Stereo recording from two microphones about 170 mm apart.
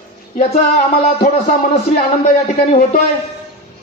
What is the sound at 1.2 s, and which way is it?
A man's voice, 45° left (ahead or behind).